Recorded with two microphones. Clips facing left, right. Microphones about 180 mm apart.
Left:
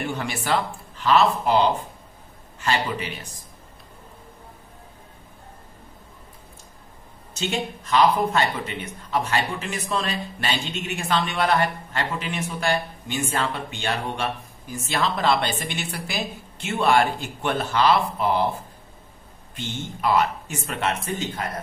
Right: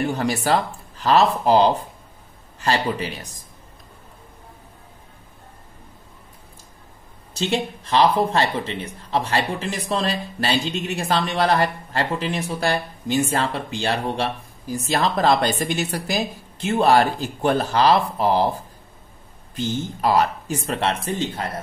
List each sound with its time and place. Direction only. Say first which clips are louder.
0.0 s speech: right 6 dB; 40° right (ahead or behind)
7.3 s speech: right 4 dB; 35° right (ahead or behind)
19.5 s speech: right 7 dB; 40° right (ahead or behind)